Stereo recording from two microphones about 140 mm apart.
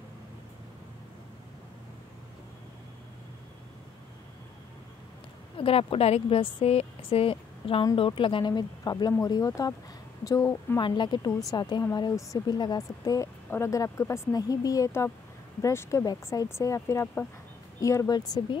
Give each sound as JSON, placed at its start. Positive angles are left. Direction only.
{"t": 5.6, "sound": "speech", "side_deg": 40}
{"t": 10.8, "sound": "speech", "side_deg": 30}